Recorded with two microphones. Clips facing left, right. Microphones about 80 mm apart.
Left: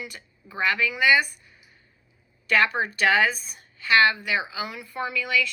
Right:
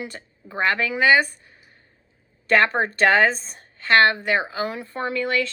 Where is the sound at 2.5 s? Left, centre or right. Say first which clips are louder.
Right 4 dB; right.